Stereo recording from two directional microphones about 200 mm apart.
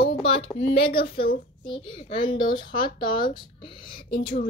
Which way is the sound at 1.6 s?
25° left (ahead or behind).